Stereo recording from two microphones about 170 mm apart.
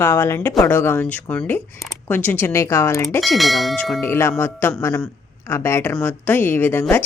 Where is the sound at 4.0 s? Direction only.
15° left (ahead or behind).